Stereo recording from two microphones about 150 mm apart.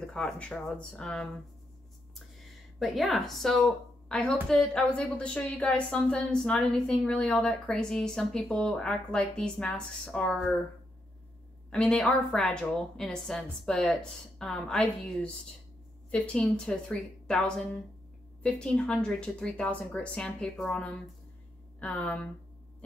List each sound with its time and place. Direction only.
0.0 s a woman's voice: 5° left (ahead or behind)
2.8 s a woman's voice: centre (ahead or behind)
11.7 s a woman's voice: 5° left (ahead or behind)